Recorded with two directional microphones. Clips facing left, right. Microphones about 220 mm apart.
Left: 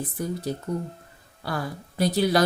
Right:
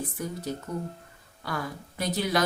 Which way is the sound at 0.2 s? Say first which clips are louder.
Left 6 dB; 35° left (ahead or behind).